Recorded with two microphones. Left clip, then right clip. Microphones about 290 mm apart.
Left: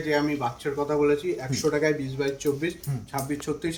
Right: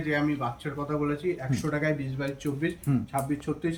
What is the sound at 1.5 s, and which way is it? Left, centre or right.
Speech, centre.